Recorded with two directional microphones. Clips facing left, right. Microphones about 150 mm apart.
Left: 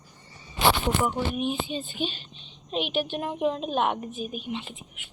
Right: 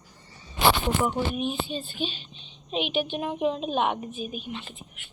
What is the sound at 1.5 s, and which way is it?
A woman's voice, 10° left (ahead or behind).